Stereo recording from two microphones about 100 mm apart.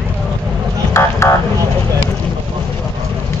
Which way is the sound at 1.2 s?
30° left (ahead or behind).